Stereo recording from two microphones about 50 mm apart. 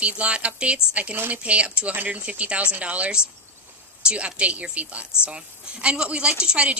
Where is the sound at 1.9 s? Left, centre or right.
Right.